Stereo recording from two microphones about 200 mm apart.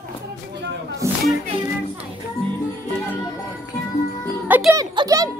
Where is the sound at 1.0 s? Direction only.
15° right (ahead or behind).